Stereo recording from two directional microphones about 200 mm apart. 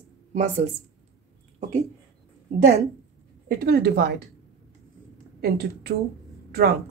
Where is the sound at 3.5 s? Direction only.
50° right (ahead or behind).